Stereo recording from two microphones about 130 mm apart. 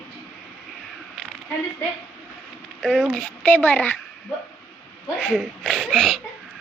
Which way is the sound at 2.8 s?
Centre (ahead or behind).